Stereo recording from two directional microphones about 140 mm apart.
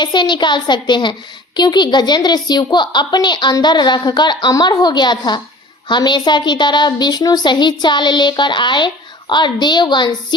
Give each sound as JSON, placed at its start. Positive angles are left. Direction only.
{"t": 0.0, "sound": "a woman's voice", "side_deg": 35}